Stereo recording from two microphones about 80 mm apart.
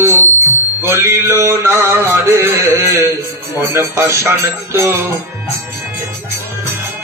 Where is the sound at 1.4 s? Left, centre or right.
Right.